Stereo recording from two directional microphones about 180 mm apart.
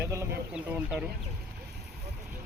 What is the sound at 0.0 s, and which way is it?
Chicken, 15° right (ahead or behind).